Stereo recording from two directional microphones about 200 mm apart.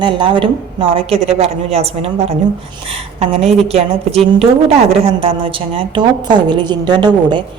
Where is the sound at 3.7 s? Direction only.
30° right (ahead or behind).